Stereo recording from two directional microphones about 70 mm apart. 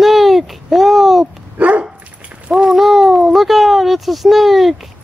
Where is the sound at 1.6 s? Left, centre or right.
Right.